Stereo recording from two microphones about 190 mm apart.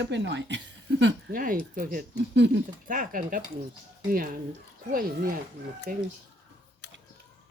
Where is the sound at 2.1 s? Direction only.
65° right (ahead or behind).